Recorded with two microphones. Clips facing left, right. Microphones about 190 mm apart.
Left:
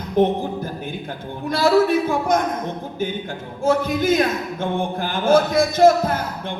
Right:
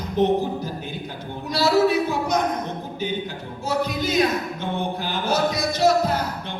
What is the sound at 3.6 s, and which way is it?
Speech, 50° left (ahead or behind).